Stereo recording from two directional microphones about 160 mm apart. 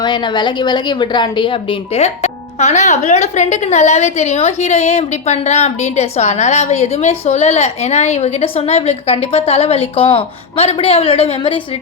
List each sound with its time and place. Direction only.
0.0 s a woman's voice: 30° left (ahead or behind)
2.0 s speech: 45° left (ahead or behind)